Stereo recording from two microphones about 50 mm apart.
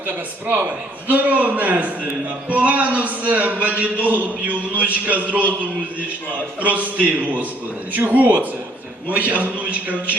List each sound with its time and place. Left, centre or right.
0.0 s a man's voice: right
6.6 s a man's voice: right